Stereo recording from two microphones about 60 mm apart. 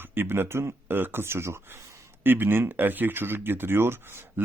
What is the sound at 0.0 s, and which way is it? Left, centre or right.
Speech, right.